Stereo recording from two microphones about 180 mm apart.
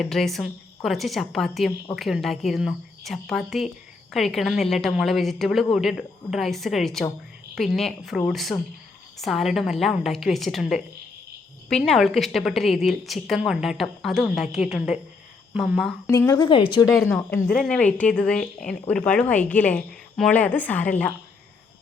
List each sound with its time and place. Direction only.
0.0 s a woman's voice: centre (ahead or behind)
16.0 s a woman's voice: 15° left (ahead or behind)
17.0 s speech: 15° left (ahead or behind)
17.5 s speech: 5° left (ahead or behind)